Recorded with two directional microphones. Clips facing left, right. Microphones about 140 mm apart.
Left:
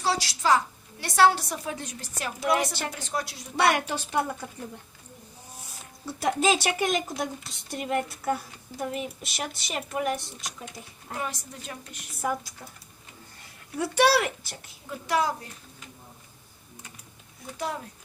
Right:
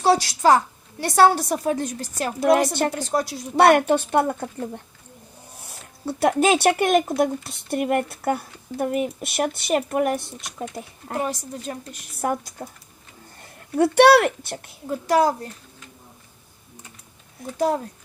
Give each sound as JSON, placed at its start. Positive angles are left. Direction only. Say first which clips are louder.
{"t": 0.0, "sound": "a woman's voice", "louder": "right 9 dB", "side_deg": -50}
{"t": 3.6, "sound": "a woman's voice", "louder": "right 9 dB", "side_deg": -55}
{"t": 11.7, "sound": "a woman's voice", "louder": "right 8 dB", "side_deg": -35}
{"t": 12.2, "sound": "a woman's voice", "louder": "right 5 dB", "side_deg": -50}
{"t": 13.7, "sound": "speech", "louder": "right 8 dB", "side_deg": -60}
{"t": 14.8, "sound": "a woman's voice", "louder": "right 7 dB", "side_deg": -40}